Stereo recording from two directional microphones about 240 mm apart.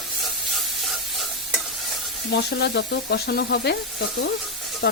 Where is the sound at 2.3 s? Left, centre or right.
Left.